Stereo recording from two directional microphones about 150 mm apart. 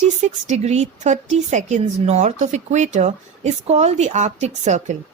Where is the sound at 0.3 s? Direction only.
50° right (ahead or behind).